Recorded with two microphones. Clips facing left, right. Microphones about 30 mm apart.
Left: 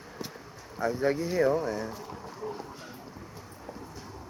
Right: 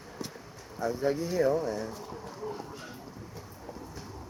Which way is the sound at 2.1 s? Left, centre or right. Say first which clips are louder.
Even; centre.